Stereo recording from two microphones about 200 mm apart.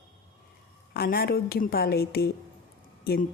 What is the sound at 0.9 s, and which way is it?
Speech, 50° left (ahead or behind).